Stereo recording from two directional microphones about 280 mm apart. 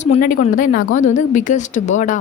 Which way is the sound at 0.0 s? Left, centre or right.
Left.